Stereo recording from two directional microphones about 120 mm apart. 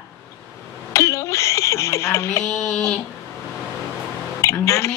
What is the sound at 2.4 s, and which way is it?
Speech, centre (ahead or behind).